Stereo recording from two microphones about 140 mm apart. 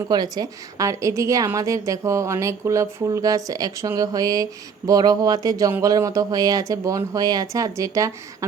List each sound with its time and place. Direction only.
0.1 s speech: 30° right (ahead or behind)